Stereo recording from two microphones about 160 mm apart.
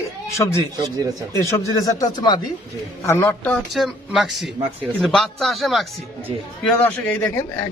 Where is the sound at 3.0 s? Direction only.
15° left (ahead or behind).